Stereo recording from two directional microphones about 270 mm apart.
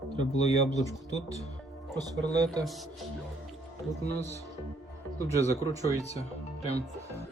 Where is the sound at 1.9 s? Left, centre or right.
Centre.